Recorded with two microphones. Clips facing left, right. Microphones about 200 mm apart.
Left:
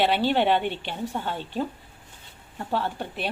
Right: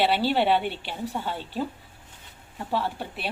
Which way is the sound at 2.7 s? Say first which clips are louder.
Left 1 dB; 5° right (ahead or behind).